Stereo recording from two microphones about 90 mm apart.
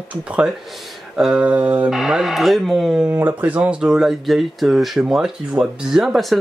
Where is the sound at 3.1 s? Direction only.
20° right (ahead or behind); by 6.4 s 5° right (ahead or behind).